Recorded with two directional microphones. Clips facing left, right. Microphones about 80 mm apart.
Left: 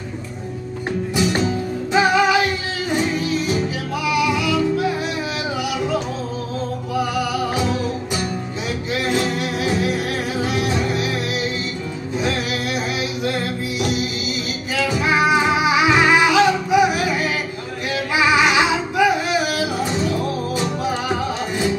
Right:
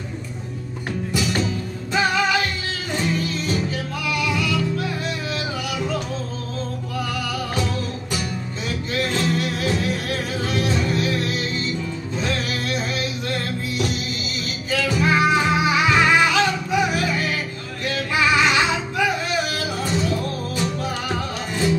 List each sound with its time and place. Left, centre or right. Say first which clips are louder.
1.9 s music: left 4 dB; centre
6.9 s music: left 7 dB; centre
9.0 s music: left 1 dB; centre